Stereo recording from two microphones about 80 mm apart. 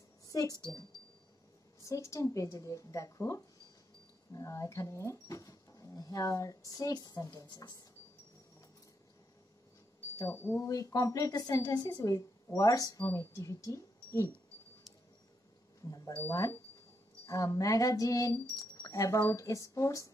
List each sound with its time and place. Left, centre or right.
0.3 s a sound: left
1.8 s speech: left
10.3 s speech: left
10.7 s speech: left
16.2 s speech: left